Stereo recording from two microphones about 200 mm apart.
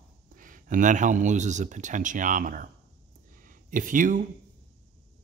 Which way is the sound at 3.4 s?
40° right (ahead or behind).